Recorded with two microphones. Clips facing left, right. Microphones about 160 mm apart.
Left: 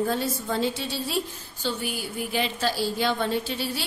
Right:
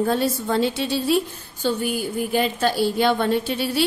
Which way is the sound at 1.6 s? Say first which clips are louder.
Right 7 dB; 50° right (ahead or behind).